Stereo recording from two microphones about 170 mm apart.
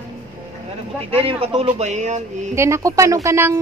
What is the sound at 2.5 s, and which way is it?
Speech, 15° right (ahead or behind).